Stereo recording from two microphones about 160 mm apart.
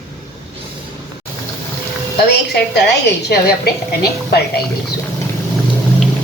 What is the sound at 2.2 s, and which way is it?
Speech, 90° left.